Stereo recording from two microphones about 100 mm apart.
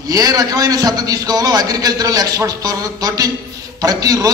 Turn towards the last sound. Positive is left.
turn(degrees=-35)  # may be behind; listen again after turning